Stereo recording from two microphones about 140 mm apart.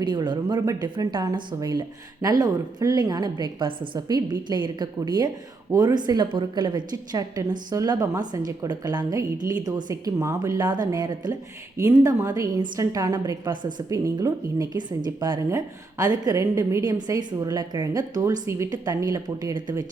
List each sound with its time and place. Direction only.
0.0 s a woman's voice: 30° right (ahead or behind)